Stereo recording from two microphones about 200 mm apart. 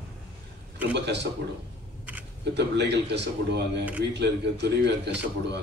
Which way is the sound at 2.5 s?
55° right (ahead or behind).